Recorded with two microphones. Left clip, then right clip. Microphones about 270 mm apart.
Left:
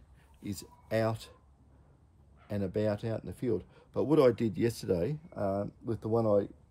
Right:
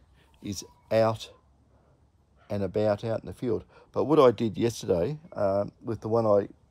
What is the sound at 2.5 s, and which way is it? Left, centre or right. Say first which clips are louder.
Speech: right 6 dB; centre.